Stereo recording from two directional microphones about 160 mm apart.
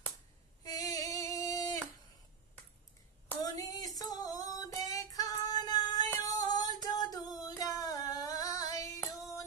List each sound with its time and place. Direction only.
0.7 s female singing: 25° left (ahead or behind)
3.5 s female singing: 20° left (ahead or behind)